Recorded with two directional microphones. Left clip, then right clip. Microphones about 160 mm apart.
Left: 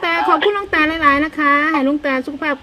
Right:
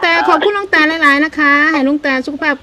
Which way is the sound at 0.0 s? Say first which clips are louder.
Right 4 dB; 35° right (ahead or behind).